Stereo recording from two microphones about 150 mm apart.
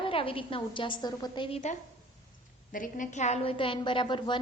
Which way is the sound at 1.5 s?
40° left (ahead or behind).